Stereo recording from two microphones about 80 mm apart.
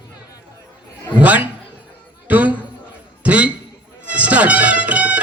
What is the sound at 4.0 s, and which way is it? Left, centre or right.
Music, centre.